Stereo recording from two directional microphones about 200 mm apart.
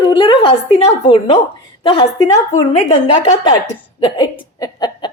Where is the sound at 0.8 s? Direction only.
30° left (ahead or behind).